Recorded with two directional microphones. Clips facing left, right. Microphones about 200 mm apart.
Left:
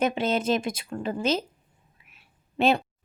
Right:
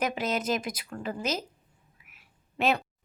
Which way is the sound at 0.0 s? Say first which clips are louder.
Left 5 dB; 25° left (ahead or behind).